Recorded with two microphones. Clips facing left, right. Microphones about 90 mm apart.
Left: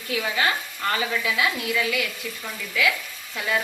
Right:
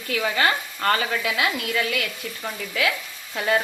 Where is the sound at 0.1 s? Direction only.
55° right (ahead or behind).